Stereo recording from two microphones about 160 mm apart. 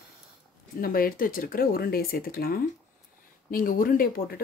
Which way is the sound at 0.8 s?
65° left (ahead or behind).